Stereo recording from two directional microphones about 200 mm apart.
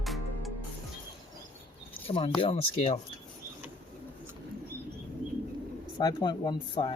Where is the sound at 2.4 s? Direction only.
30° left (ahead or behind).